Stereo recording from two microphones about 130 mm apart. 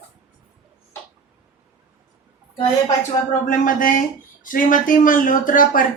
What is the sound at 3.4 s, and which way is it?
A woman's voice, 90° left.